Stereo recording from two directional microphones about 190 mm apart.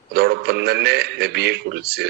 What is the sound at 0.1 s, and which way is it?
A man's voice, 60° right (ahead or behind).